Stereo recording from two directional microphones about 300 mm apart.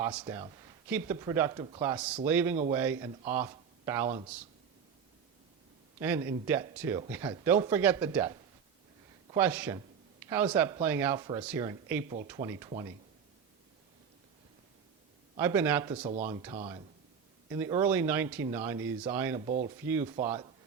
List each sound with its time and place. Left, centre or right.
0.0 s speech: centre
6.0 s speech: centre
15.4 s speech: centre
19.5 s speech: right